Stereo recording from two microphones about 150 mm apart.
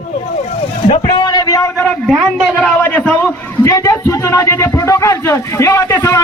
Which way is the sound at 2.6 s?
10° left (ahead or behind).